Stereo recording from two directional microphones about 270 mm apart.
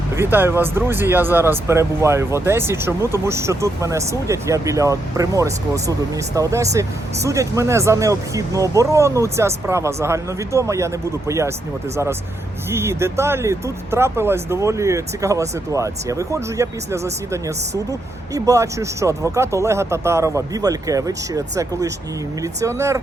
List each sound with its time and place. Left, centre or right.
0.2 s speech: centre
12.7 s speech: centre